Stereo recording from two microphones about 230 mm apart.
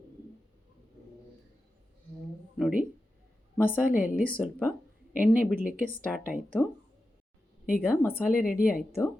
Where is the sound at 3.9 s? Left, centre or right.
Left.